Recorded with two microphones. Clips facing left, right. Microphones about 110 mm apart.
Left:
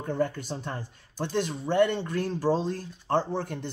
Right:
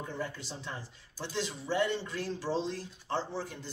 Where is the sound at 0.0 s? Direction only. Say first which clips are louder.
Left 10 dB; 55° left (ahead or behind).